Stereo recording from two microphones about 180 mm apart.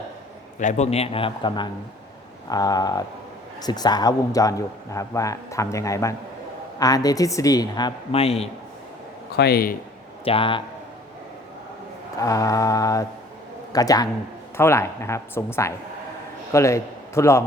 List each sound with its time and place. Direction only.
0.6 s a man's voice: 40° left (ahead or behind)
9.3 s speech: 60° left (ahead or behind)
10.2 s a woman's voice: 30° left (ahead or behind)
12.2 s a woman's voice: 20° left (ahead or behind)